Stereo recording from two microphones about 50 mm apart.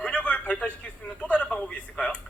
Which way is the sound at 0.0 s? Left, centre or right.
Left.